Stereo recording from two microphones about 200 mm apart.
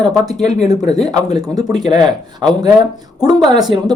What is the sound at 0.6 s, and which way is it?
Speech, 20° right (ahead or behind).